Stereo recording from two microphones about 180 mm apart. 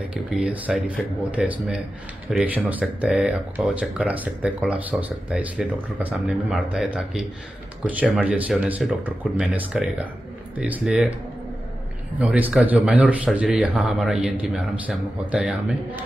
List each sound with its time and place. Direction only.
0.1 s speech: 5° right (ahead or behind)
12.2 s speech: 10° right (ahead or behind)